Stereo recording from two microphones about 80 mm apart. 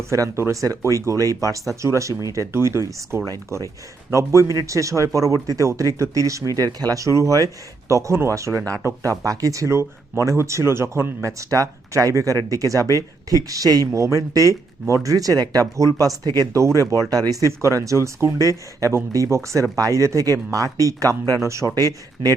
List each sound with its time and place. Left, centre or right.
0.1 s speech: right
3.2 s speech: right